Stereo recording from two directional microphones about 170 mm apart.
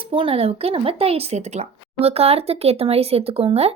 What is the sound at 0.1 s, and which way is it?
Speech, 30° right (ahead or behind).